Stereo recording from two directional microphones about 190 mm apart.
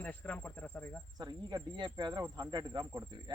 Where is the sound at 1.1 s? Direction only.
20° right (ahead or behind).